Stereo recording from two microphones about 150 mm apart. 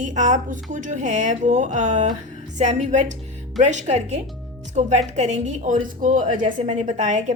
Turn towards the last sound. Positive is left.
turn(degrees=-55)  # may be behind; listen again after turning